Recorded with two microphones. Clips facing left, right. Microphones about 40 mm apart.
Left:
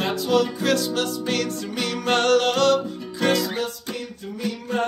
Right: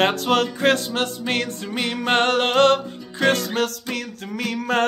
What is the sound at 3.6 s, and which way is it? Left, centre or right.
Music, right.